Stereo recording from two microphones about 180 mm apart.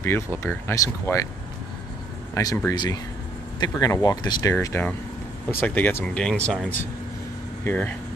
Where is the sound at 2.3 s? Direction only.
15° left (ahead or behind).